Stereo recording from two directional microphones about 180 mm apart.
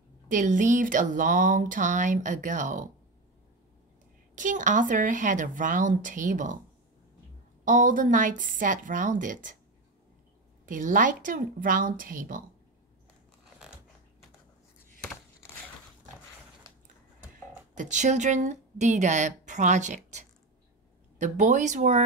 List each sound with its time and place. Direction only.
0.3 s speech: 45° right (ahead or behind)
4.4 s speech: 45° right (ahead or behind)
7.6 s speech: 45° right (ahead or behind)
10.6 s speech: 45° right (ahead or behind)
17.7 s a woman's voice: 40° right (ahead or behind)